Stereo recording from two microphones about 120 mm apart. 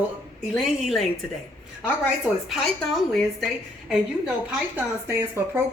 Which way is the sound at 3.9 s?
10° right (ahead or behind).